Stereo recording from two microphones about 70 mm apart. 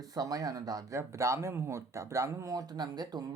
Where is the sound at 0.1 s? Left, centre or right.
Right.